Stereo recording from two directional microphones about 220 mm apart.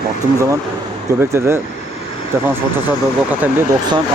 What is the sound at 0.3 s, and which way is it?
Speech, 15° right (ahead or behind).